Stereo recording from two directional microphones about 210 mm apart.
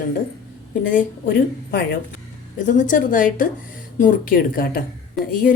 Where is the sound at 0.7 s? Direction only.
40° left (ahead or behind).